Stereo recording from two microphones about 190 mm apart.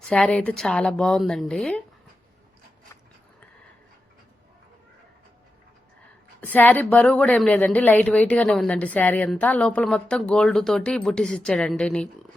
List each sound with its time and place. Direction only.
0.0 s a woman's voice: 5° left (ahead or behind)
6.4 s a woman's voice: 10° left (ahead or behind)